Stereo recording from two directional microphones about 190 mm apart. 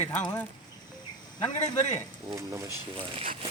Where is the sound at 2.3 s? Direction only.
15° right (ahead or behind).